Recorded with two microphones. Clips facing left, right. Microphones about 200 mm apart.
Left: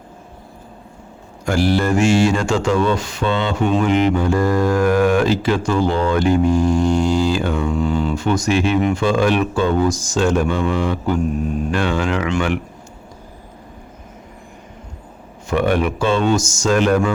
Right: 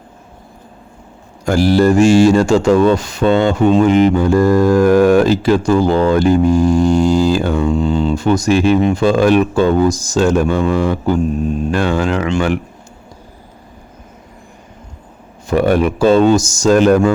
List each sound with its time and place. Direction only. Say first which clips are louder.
1.5 s speech: right 6 dB; 40° right (ahead or behind)
7.7 s speech: right 4 dB; 25° right (ahead or behind)
15.4 s speech: right 4 dB; 40° right (ahead or behind)